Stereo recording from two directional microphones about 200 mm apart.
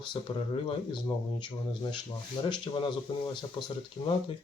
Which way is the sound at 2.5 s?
25° left (ahead or behind).